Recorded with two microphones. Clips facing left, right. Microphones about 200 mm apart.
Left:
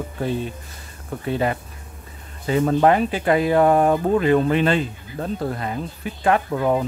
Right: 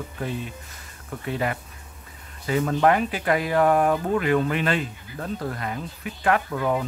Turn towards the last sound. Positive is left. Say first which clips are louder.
# left 4 dB
turn(degrees=30)  # may be behind; listen again after turning